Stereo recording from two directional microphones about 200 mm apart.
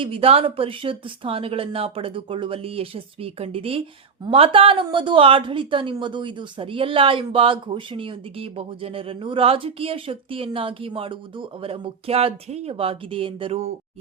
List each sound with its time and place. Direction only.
0.0 s speech: 25° right (ahead or behind)